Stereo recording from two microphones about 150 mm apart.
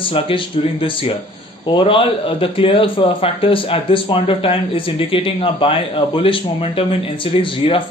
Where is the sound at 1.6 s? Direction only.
35° left (ahead or behind).